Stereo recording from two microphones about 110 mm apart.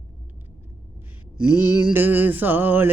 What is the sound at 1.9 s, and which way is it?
Music, 20° right (ahead or behind).